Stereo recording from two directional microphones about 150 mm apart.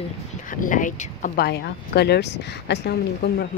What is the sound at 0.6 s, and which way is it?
Speech, 60° left (ahead or behind).